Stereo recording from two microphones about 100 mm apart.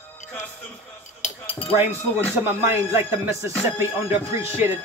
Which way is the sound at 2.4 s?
25° right (ahead or behind).